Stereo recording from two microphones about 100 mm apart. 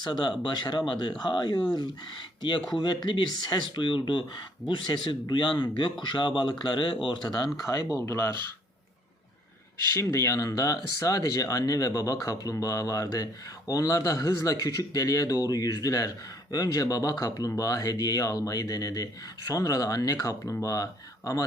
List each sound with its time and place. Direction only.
0.0 s a man's voice: 45° left (ahead or behind)
2.8 s a man's voice: 45° left (ahead or behind)
8.0 s speech: 25° left (ahead or behind)
9.9 s speech: 30° left (ahead or behind)